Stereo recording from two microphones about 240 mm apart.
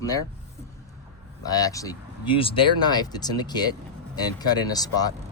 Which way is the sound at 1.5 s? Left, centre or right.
Centre.